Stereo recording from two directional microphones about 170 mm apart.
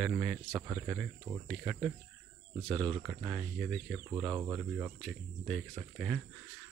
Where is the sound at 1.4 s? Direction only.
Centre (ahead or behind).